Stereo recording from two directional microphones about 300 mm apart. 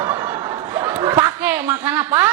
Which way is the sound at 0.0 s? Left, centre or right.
Centre.